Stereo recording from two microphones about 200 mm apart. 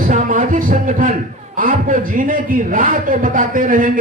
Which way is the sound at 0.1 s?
40° right (ahead or behind).